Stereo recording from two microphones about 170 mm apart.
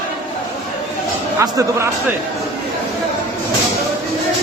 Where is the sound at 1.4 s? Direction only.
15° right (ahead or behind).